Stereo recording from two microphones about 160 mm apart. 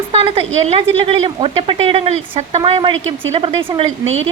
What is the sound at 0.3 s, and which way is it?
Speech, 35° right (ahead or behind).